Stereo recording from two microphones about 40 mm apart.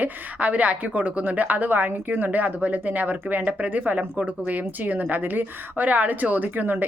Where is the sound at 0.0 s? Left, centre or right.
Right.